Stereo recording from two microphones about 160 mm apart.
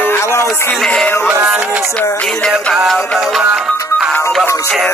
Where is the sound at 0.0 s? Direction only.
15° left (ahead or behind).